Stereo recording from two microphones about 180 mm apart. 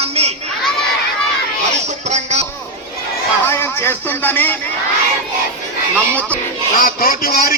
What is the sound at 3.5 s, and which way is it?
A man's voice, 15° left (ahead or behind).